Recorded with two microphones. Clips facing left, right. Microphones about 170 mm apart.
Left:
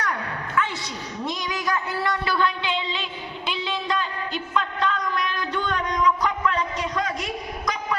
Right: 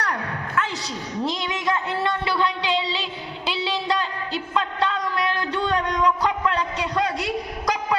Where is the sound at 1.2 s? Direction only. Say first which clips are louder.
Right 3 dB; 30° right (ahead or behind).